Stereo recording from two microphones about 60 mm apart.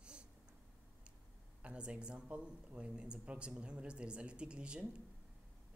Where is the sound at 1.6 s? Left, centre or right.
Centre.